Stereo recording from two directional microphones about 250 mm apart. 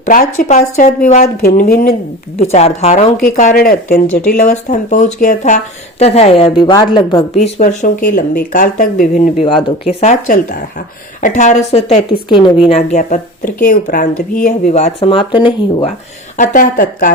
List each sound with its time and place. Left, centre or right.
0.0 s speech: left
2.4 s speech: left
9.5 s speech: centre
10.0 s speech: left
12.3 s a woman's voice: centre
16.4 s speech: left